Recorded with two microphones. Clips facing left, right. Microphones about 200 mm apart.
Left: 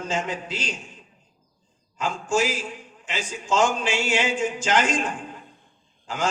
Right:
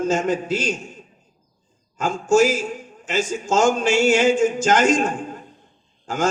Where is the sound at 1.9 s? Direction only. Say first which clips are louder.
Right 7 dB; 45° right (ahead or behind).